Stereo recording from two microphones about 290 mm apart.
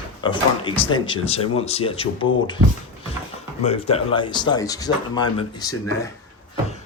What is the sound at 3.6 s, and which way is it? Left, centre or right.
Speech, centre.